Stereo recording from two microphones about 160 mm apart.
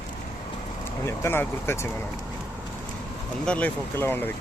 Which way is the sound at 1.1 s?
15° left (ahead or behind).